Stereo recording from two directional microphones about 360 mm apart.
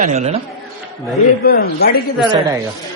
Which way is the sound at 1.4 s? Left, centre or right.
Left.